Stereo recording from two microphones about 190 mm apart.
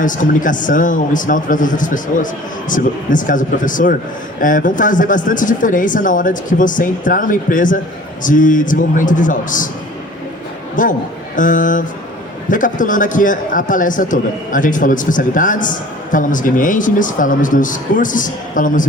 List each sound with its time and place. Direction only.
0.0 s a man's voice: 45° left (ahead or behind)
10.8 s a man's voice: 45° left (ahead or behind)